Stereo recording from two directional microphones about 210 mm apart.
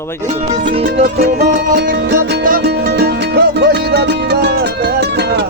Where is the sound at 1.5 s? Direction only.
50° right (ahead or behind).